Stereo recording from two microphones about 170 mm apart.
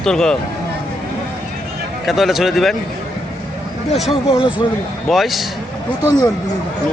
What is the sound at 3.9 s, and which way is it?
Speech, centre (ahead or behind).